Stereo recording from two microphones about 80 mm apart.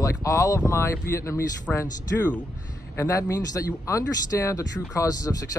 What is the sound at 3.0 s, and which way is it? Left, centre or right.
Speech, left.